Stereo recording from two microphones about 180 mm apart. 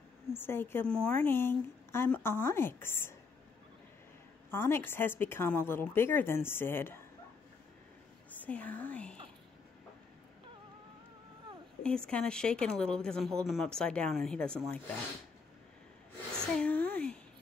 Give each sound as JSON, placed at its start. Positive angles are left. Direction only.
{"t": 0.3, "sound": "a woman's voice", "side_deg": 10}
{"t": 4.5, "sound": "a woman's voice", "side_deg": 15}
{"t": 8.4, "sound": "speech", "side_deg": 10}
{"t": 11.8, "sound": "speech", "side_deg": 5}
{"t": 16.5, "sound": "a sound", "side_deg": 10}